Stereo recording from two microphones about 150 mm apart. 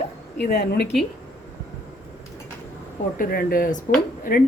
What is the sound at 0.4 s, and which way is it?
Speech, 90° left.